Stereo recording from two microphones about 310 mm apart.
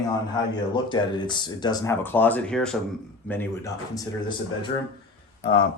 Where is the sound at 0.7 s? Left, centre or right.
Centre.